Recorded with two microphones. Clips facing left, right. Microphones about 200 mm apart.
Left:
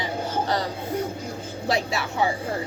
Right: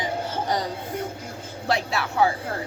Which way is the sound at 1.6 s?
Centre (ahead or behind).